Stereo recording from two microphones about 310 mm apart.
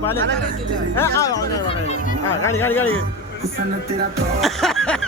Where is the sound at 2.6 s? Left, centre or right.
Centre.